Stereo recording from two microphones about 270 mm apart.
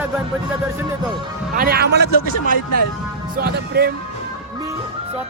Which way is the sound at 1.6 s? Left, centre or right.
Right.